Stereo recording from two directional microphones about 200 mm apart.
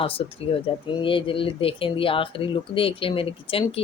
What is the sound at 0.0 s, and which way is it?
Speech, 25° left (ahead or behind).